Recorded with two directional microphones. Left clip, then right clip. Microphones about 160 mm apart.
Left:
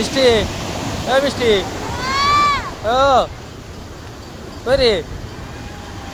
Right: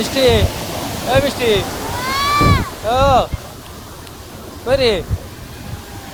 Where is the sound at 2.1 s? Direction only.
5° right (ahead or behind).